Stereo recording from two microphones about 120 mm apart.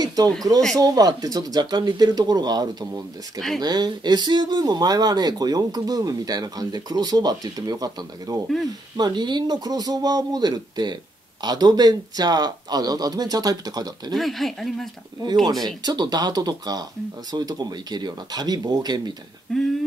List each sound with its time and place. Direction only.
0.0 s a sound: 35° right (ahead or behind)
0.7 s speech: 30° right (ahead or behind)
3.3 s speech: 5° left (ahead or behind)
3.6 s speech: 35° right (ahead or behind)
14.1 s speech: centre (ahead or behind)
15.6 s speech: 35° right (ahead or behind)
19.5 s speech: 5° left (ahead or behind)